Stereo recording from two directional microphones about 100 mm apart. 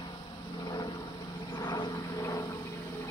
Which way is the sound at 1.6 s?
55° left (ahead or behind).